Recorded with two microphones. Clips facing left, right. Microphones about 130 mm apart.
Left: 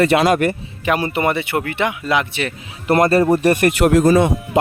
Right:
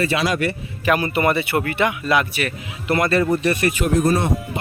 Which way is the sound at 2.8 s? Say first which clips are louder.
Left 5 dB; 40° left (ahead or behind).